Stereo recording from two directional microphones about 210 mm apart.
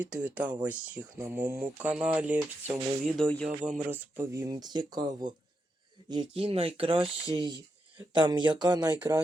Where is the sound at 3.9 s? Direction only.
10° right (ahead or behind).